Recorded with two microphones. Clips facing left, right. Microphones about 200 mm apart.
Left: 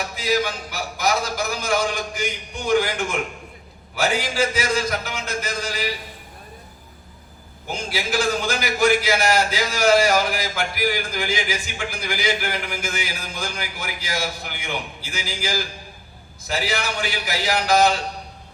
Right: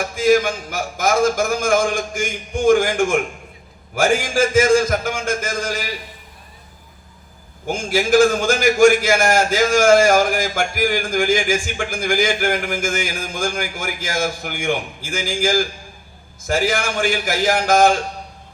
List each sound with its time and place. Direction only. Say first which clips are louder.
0.0 s a man's voice: right 7 dB; 50° right (ahead or behind)
7.7 s a man's voice: right 9 dB; 45° right (ahead or behind)